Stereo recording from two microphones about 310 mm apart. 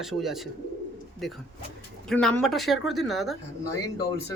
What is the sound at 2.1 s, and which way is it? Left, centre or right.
Speech, centre.